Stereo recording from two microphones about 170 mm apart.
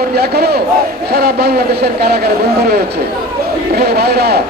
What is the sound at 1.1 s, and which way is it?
A man's voice, 70° right (ahead or behind).